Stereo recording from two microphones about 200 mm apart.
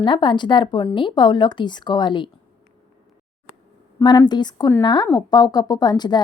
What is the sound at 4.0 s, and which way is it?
A woman's voice, 20° left (ahead or behind).